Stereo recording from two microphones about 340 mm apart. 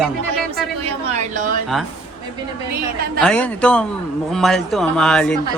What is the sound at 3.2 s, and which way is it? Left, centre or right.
A man's voice, centre.